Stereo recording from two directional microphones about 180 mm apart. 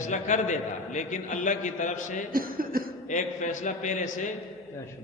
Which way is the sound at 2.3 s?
55° right (ahead or behind).